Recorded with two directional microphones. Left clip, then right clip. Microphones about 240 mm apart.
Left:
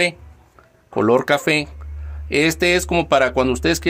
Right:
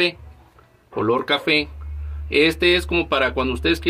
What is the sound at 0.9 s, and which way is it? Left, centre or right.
Speech, left.